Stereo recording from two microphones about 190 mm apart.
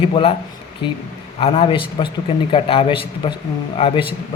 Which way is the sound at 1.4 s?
30° left (ahead or behind).